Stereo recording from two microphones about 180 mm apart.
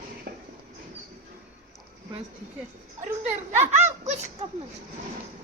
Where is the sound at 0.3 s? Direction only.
55° right (ahead or behind).